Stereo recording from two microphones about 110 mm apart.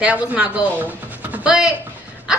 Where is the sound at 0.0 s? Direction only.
10° right (ahead or behind).